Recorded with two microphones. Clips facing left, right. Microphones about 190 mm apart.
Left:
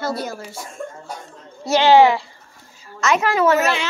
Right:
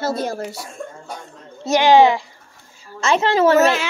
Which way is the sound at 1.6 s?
15° right (ahead or behind).